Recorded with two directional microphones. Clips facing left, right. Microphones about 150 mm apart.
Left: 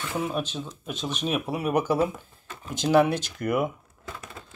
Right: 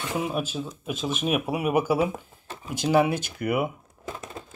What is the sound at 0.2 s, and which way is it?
Speech, 5° right (ahead or behind).